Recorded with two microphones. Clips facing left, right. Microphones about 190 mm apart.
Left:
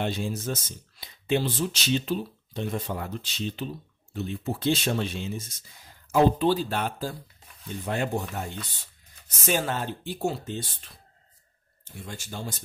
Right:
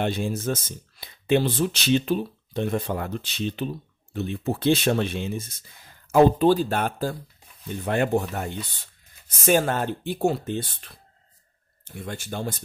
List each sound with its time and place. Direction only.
0.0 s speech: 55° right (ahead or behind)
6.1 s speech: 50° right (ahead or behind)